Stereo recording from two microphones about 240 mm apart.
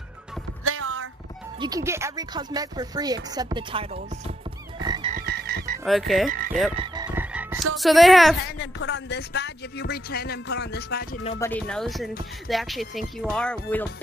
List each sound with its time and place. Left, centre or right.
0.7 s a sound: right
1.6 s speech: centre
4.7 s frog: centre
5.1 s frog: right
5.9 s speech: centre
7.2 s croak: centre
8.5 s speech: left
11.3 s speech: centre